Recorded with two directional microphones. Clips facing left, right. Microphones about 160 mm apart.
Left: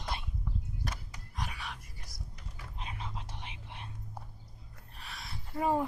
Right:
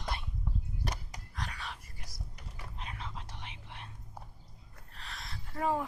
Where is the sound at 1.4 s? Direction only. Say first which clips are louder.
Left 1 dB; 10° left (ahead or behind).